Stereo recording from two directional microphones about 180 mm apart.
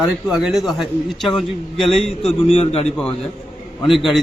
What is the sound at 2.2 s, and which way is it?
Speech, 35° left (ahead or behind).